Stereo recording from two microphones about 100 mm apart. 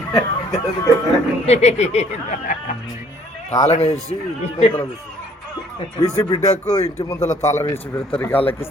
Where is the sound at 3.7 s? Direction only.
90° left.